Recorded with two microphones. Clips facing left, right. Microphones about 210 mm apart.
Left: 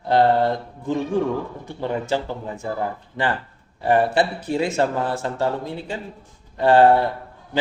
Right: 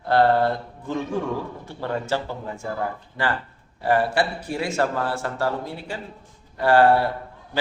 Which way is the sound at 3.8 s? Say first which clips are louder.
Left 3 dB; 20° left (ahead or behind).